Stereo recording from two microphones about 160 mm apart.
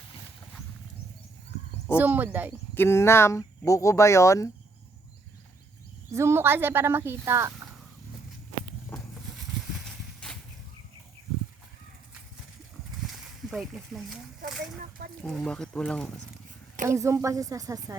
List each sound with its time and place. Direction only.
2.0 s speech: 10° right (ahead or behind)
2.7 s speech: 15° left (ahead or behind)
6.1 s speech: 15° right (ahead or behind)
9.8 s horse: centre (ahead or behind)
13.5 s speech: centre (ahead or behind)
14.8 s speech: 60° right (ahead or behind)
15.2 s speech: 5° left (ahead or behind)
16.9 s speech: 20° right (ahead or behind)